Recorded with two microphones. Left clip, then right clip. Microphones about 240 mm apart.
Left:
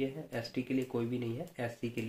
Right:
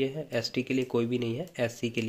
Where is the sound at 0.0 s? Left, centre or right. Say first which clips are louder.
Right 7 dB; right.